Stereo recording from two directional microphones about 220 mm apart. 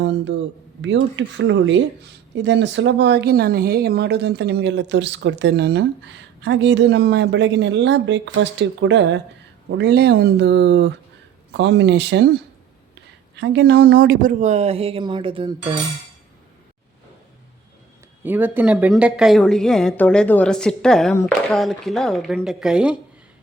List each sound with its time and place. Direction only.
0.0 s a woman's voice: 55° right (ahead or behind); by 15.8 s 25° right (ahead or behind)
18.2 s speech: 10° right (ahead or behind)